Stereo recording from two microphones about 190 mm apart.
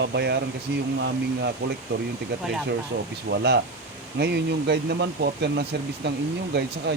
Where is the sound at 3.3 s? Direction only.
60° right (ahead or behind).